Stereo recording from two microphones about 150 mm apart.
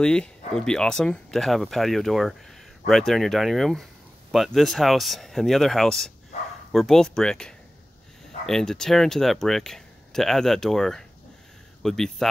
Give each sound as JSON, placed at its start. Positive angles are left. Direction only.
{"t": 0.0, "sound": "speech", "side_deg": 5}